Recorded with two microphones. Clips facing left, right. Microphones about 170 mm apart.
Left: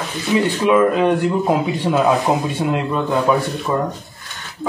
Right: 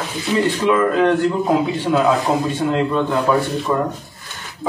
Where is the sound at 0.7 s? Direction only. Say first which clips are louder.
Left 2 dB; 15° left (ahead or behind).